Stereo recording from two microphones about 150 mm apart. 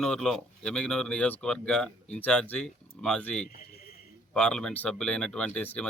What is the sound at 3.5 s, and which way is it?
Speech, 90° left.